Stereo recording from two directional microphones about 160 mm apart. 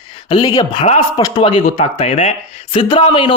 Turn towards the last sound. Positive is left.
turn(degrees=35)  # may be behind; listen again after turning